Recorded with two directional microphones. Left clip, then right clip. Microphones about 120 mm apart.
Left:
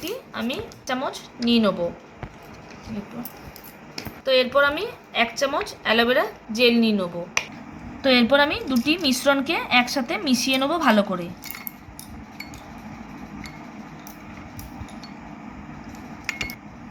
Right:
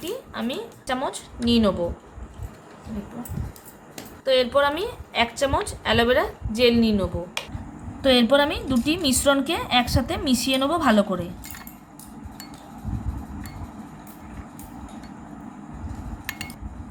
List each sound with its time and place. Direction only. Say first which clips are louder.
0.0 s a woman's voice: even; 20° right (ahead or behind)
4.3 s a woman's voice: left 1 dB; 25° right (ahead or behind)